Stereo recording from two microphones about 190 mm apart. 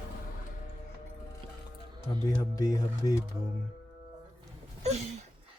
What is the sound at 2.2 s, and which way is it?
Speech, 20° left (ahead or behind).